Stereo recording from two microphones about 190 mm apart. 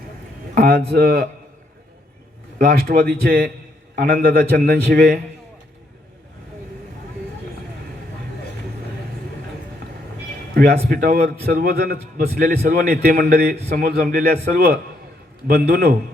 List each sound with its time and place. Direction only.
0.5 s speech: 55° right (ahead or behind)
2.6 s a man's voice: 55° right (ahead or behind)
10.5 s a man's voice: 55° right (ahead or behind)